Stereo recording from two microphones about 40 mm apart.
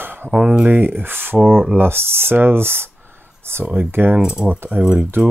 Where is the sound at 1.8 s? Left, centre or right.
Right.